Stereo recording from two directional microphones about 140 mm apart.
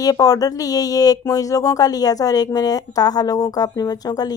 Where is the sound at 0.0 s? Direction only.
25° left (ahead or behind).